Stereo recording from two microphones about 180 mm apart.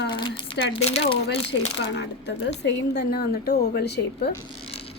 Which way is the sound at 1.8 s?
70° left (ahead or behind).